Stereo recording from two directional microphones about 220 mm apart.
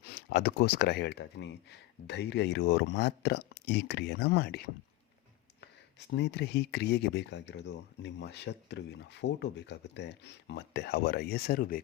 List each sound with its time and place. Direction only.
0.0 s speech: 45° left (ahead or behind)
6.1 s speech: 50° left (ahead or behind)